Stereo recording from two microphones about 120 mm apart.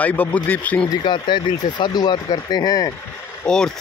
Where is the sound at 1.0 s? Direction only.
40° left (ahead or behind).